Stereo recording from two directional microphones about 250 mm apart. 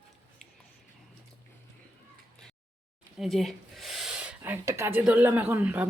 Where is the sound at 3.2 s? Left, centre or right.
Centre.